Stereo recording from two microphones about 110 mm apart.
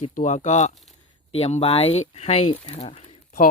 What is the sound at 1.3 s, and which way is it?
Speech, 70° left (ahead or behind).